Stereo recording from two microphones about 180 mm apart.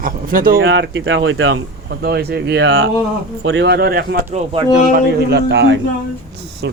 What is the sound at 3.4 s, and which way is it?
Speech, 80° right.